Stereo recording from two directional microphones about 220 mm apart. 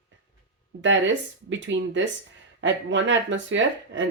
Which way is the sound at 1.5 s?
55° right (ahead or behind).